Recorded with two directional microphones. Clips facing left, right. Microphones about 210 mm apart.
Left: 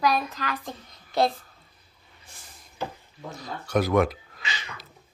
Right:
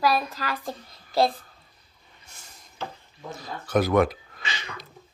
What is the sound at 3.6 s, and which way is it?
Speech, centre (ahead or behind).